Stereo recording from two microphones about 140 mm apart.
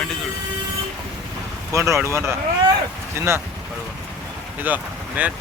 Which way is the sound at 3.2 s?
20° right (ahead or behind).